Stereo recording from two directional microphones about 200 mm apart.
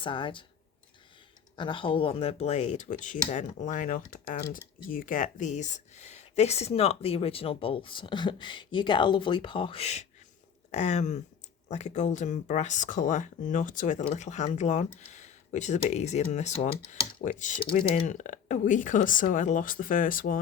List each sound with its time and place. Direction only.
0.0 s speech: 25° left (ahead or behind)
1.5 s speech: 25° left (ahead or behind)
17.0 s speech: 45° left (ahead or behind)